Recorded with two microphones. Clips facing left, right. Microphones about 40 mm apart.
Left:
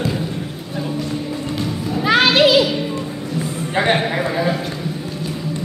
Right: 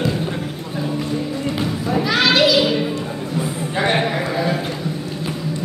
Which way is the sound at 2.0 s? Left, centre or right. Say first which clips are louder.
Left 3 dB; left.